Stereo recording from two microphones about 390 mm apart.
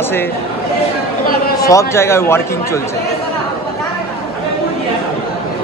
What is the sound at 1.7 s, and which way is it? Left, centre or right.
A man's voice, centre.